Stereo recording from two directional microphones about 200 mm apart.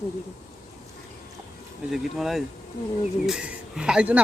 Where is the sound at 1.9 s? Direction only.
Centre (ahead or behind).